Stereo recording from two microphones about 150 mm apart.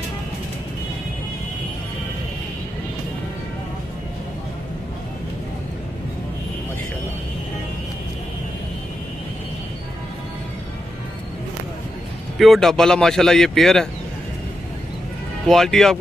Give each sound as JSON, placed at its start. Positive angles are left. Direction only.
{"t": 12.4, "sound": "speech", "side_deg": 0}
{"t": 15.4, "sound": "speech", "side_deg": 0}